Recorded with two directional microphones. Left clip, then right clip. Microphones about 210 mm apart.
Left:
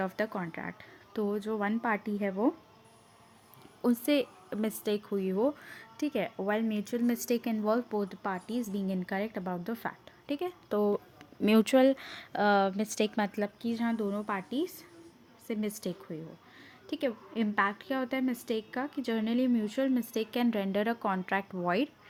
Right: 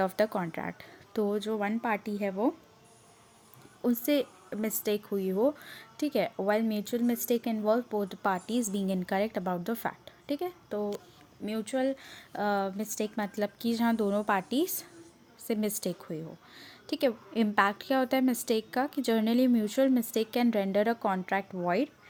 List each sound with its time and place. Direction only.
0.0 s a woman's voice: 15° right (ahead or behind)
3.8 s a woman's voice: centre (ahead or behind)
8.2 s a woman's voice: 20° right (ahead or behind)
10.7 s speech: 15° left (ahead or behind)
11.4 s speech: 30° left (ahead or behind)
11.9 s speech: 10° left (ahead or behind)
13.4 s a woman's voice: 20° right (ahead or behind); by 21.8 s centre (ahead or behind)